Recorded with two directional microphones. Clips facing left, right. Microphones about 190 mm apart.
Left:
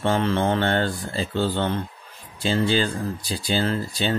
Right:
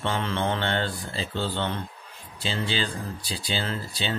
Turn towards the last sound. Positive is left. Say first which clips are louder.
# left 6 dB
turn(degrees=45)  # may be behind; listen again after turning